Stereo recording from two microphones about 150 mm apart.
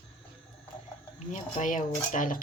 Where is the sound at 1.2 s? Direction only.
50° left (ahead or behind).